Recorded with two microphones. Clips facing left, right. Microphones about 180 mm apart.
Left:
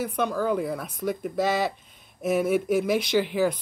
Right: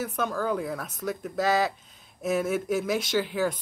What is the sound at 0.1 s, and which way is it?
Speech, 10° left (ahead or behind).